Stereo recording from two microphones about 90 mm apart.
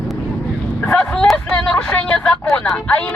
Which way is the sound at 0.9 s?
15° left (ahead or behind).